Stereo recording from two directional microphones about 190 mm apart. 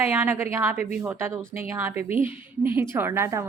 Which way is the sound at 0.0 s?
10° right (ahead or behind).